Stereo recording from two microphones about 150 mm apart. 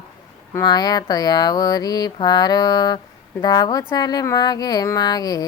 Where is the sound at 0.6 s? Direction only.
25° left (ahead or behind).